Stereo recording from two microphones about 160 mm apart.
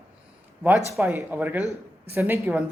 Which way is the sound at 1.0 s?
15° right (ahead or behind).